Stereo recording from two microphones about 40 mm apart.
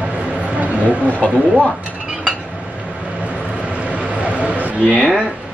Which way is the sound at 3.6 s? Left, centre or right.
Right.